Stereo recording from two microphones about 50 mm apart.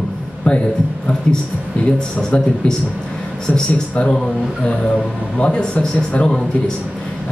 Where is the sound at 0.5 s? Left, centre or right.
Left.